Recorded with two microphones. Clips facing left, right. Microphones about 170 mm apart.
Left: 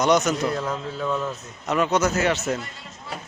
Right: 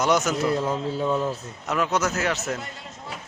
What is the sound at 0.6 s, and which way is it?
Speech, 20° right (ahead or behind).